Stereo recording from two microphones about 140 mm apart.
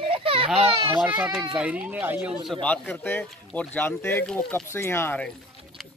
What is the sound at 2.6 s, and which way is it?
Speech, 10° left (ahead or behind).